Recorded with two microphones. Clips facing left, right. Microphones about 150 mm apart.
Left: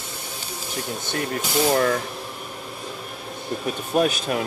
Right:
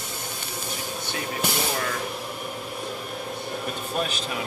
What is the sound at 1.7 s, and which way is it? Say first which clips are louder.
Speech: left 9 dB; 50° left (ahead or behind).